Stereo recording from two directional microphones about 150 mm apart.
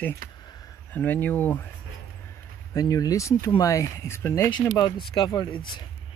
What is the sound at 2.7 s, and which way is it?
Speech, 25° left (ahead or behind).